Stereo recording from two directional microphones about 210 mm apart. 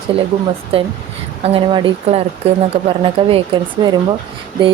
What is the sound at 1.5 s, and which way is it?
A woman's voice, 25° right (ahead or behind).